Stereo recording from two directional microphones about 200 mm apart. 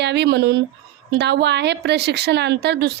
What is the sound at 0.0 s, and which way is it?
A woman's voice, 60° right (ahead or behind).